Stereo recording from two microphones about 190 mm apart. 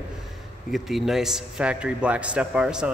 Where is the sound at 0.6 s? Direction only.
Centre (ahead or behind).